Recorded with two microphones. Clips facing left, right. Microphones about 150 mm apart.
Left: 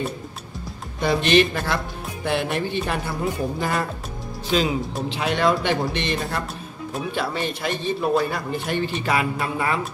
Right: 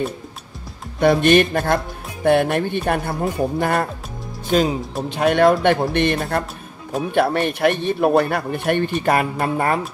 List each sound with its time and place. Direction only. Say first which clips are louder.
1.0 s a man's voice: right 4 dB; 50° right (ahead or behind)